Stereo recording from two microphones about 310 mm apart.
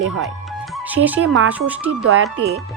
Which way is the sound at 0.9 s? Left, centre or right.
Centre.